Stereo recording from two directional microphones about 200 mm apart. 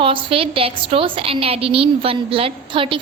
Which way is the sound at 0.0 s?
25° right (ahead or behind).